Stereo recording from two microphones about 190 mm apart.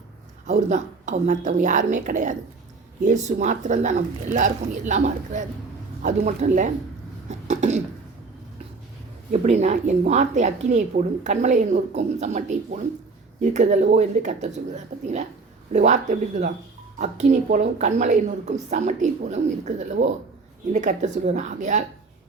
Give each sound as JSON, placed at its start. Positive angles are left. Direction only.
{"t": 0.4, "sound": "a woman's voice", "side_deg": -40}
{"t": 7.3, "sound": "throat clearing", "side_deg": -40}
{"t": 9.3, "sound": "a woman's voice", "side_deg": -35}